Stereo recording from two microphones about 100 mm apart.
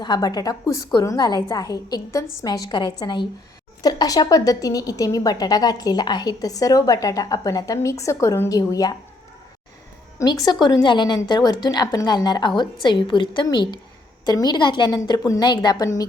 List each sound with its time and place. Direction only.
0.0 s a woman's voice: 45° left (ahead or behind)
10.2 s a woman's voice: 45° left (ahead or behind)